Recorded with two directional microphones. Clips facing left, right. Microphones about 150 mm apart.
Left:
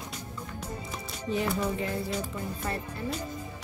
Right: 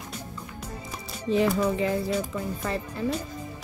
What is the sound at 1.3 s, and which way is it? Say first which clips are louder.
Speech: right 6 dB; 90° right.